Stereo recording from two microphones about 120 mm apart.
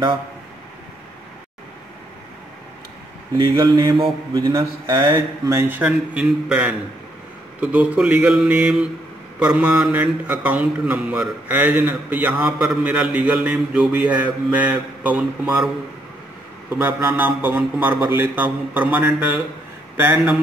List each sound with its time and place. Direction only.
3.3 s speech: 25° right (ahead or behind)
3.6 s mantra: 35° right (ahead or behind)
5.5 s speech: 20° right (ahead or behind)
5.9 s speech: 10° right (ahead or behind)
16.7 s speech: 15° right (ahead or behind)